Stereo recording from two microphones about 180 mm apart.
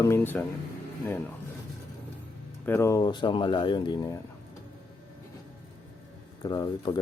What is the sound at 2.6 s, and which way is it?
Speech, 15° left (ahead or behind).